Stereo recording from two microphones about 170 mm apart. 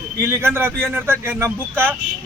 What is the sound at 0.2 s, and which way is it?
A man's voice, 15° right (ahead or behind).